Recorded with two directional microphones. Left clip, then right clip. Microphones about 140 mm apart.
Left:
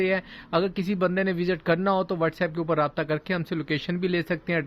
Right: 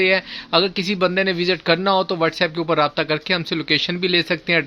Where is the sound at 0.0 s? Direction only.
15° right (ahead or behind).